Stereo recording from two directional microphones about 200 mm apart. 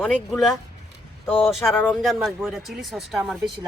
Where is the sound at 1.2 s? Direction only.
10° left (ahead or behind).